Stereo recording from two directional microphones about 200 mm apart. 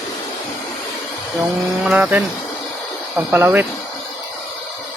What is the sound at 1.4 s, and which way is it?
Speech, 5° right (ahead or behind).